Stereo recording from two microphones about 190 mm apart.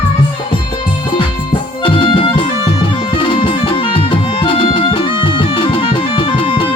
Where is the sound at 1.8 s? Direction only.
25° left (ahead or behind).